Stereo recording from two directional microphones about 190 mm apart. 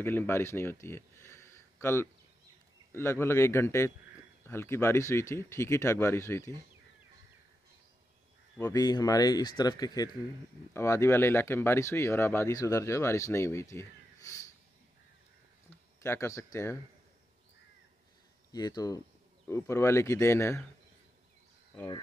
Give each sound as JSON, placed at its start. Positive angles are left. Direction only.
{"t": 0.0, "sound": "speech", "side_deg": 10}
{"t": 8.5, "sound": "speech", "side_deg": 15}
{"t": 16.0, "sound": "speech", "side_deg": 15}
{"t": 18.5, "sound": "speech", "side_deg": 20}
{"t": 21.7, "sound": "speech", "side_deg": 20}